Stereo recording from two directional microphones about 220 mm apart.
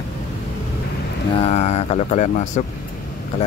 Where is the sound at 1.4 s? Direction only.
30° left (ahead or behind).